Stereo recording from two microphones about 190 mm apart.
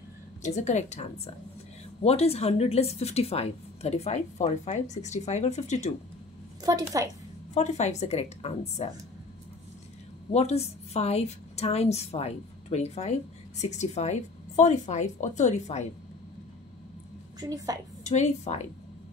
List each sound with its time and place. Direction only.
0.4 s a woman's voice: 35° left (ahead or behind)
6.6 s a woman's voice: 20° right (ahead or behind)
7.5 s a woman's voice: 35° left (ahead or behind)
10.3 s a woman's voice: 35° left (ahead or behind)
17.4 s a woman's voice: 20° right (ahead or behind)
18.0 s a woman's voice: 35° left (ahead or behind)